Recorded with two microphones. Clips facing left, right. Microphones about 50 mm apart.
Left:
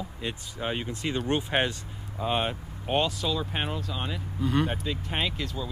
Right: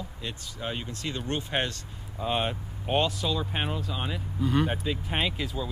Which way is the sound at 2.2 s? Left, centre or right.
Centre.